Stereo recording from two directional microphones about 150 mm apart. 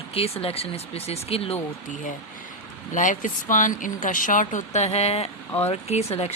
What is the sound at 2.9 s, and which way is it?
Speech, 60° left (ahead or behind).